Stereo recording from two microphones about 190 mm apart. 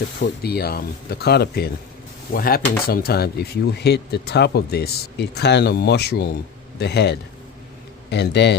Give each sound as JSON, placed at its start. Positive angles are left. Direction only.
{"t": 0.4, "sound": "speech", "side_deg": 55}